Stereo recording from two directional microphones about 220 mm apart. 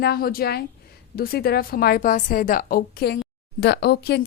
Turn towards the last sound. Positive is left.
turn(degrees=45)  # may be behind; listen again after turning